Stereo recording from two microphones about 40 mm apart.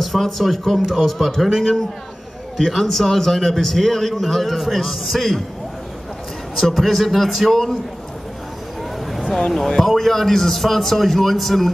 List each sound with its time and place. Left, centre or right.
0.0 s a man's voice: centre
2.5 s a man's voice: centre
6.5 s a man's voice: centre
9.1 s a sound: centre
9.5 s a man's voice: centre